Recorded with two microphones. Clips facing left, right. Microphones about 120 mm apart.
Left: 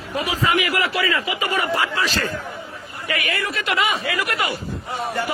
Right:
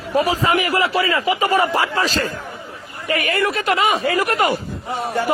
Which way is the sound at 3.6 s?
40° right (ahead or behind).